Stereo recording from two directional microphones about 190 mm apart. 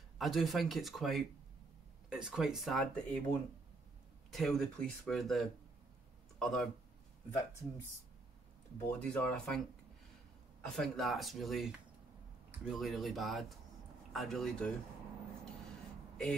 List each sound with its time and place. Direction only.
0.2 s speech: centre (ahead or behind)
8.8 s speech: 5° left (ahead or behind)
10.6 s speech: centre (ahead or behind)